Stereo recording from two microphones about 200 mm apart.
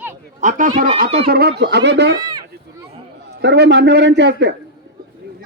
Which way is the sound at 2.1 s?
20° right (ahead or behind).